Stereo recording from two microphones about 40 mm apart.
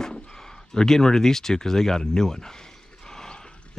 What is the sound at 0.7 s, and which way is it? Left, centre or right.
Speech, centre.